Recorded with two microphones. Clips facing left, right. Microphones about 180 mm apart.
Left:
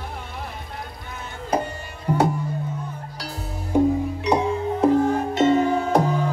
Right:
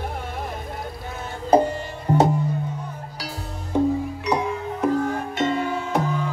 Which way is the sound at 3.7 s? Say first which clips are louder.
Left 2 dB; 10° left (ahead or behind).